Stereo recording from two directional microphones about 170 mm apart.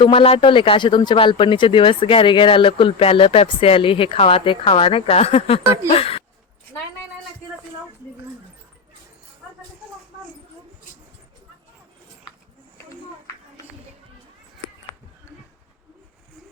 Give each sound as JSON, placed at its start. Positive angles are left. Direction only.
{"t": 0.0, "sound": "speech", "side_deg": 30}